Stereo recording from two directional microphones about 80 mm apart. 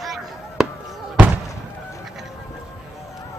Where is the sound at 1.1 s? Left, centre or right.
Right.